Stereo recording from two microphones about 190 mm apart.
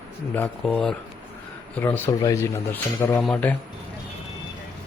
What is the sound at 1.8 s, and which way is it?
Speech, 15° left (ahead or behind).